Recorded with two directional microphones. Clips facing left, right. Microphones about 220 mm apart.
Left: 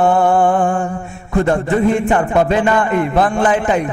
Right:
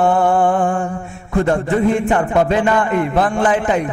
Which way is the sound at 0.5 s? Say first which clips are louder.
Left 1 dB; 25° left (ahead or behind).